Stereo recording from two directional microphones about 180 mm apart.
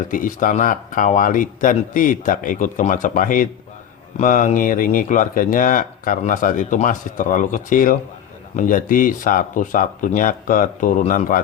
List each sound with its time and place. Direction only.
0.1 s speech: 50° left (ahead or behind)